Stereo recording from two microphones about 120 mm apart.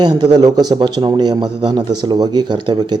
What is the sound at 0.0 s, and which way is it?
A man's voice, 35° right (ahead or behind).